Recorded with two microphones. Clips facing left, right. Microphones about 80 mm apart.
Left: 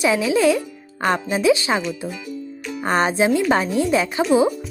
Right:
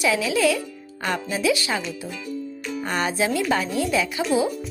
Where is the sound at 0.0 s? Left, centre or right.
Left.